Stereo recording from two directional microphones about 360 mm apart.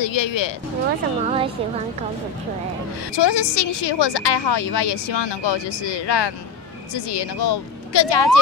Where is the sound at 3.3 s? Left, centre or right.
Left.